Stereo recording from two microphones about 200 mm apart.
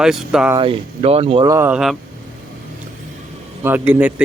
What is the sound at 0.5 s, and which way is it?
Speech, 25° right (ahead or behind).